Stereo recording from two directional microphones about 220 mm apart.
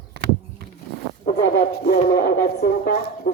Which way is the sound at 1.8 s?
45° left (ahead or behind).